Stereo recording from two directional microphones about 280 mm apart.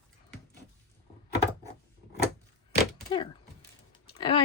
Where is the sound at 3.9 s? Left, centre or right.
Centre.